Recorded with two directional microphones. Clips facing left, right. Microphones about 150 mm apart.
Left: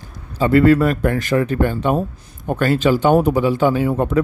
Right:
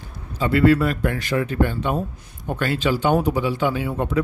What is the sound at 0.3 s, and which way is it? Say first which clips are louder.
Speech: left 4 dB; 45° left (ahead or behind).